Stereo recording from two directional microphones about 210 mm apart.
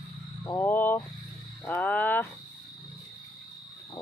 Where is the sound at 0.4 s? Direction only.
10° left (ahead or behind).